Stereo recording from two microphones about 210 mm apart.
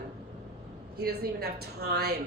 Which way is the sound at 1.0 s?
50° right (ahead or behind).